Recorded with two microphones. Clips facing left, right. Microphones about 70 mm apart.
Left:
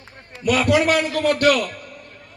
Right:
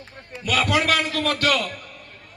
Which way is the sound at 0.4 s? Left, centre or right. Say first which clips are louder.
Left 4 dB; left.